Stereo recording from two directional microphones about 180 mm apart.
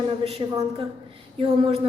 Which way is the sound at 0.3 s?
30° right (ahead or behind).